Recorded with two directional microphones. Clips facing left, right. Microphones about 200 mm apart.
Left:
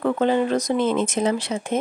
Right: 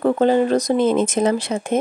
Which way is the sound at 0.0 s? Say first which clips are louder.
Right 4 dB; 40° right (ahead or behind).